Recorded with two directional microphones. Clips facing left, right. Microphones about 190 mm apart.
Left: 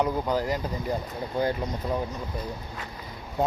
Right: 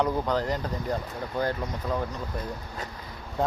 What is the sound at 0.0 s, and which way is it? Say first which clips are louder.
Speech: even; 5° left (ahead or behind).